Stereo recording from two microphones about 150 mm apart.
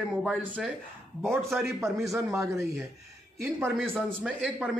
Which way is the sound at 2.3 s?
20° right (ahead or behind).